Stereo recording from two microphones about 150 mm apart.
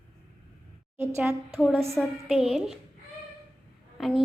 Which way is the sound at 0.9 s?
15° right (ahead or behind).